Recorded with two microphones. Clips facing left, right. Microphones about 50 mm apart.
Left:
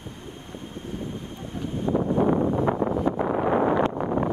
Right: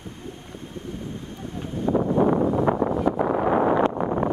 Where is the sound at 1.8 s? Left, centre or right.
Right.